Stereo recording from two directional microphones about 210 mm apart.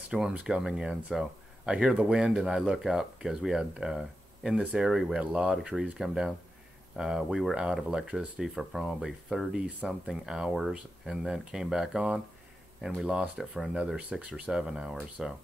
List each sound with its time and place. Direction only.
0.1 s speech: 5° right (ahead or behind)